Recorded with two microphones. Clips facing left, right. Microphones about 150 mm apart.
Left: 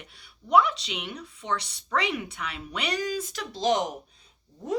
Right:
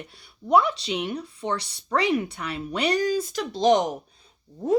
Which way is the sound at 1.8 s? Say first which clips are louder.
Right 6 dB; 35° right (ahead or behind).